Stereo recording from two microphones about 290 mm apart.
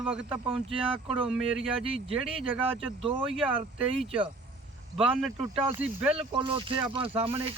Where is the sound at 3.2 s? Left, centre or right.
Centre.